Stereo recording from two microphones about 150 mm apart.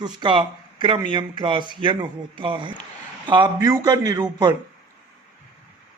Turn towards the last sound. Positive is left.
turn(degrees=-25)  # may be behind; listen again after turning